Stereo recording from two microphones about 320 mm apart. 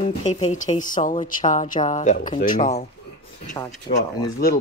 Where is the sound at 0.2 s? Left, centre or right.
Centre.